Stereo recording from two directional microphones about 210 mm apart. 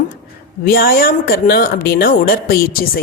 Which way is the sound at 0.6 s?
45° left (ahead or behind).